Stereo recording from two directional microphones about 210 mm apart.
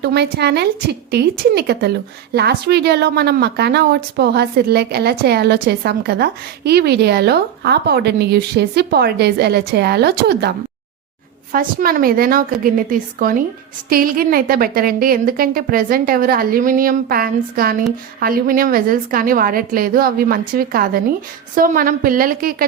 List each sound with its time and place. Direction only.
0.0 s a woman's voice: 50° right (ahead or behind)
11.5 s a woman's voice: 45° right (ahead or behind)